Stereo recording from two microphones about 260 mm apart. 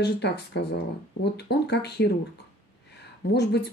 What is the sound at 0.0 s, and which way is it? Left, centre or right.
Speech, left.